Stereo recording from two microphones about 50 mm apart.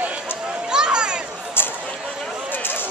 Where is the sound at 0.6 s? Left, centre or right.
Centre.